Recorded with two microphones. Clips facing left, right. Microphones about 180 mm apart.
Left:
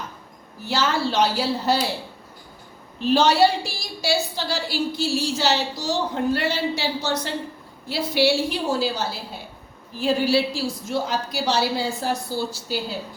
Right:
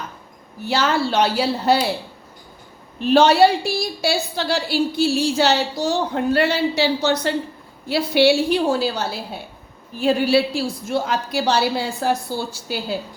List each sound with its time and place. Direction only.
0.7 s a woman's voice: 65° right (ahead or behind)
3.1 s a woman's voice: 60° right (ahead or behind)